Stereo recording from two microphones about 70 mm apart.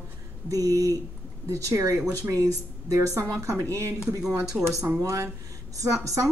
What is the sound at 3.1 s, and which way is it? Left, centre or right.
Speech, right.